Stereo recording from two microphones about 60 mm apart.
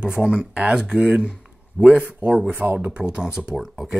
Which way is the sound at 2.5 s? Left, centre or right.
Right.